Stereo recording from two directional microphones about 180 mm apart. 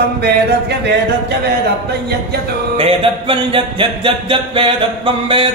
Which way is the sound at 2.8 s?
30° right (ahead or behind).